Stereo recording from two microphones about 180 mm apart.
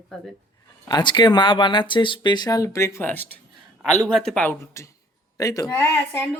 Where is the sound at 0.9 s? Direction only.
25° left (ahead or behind).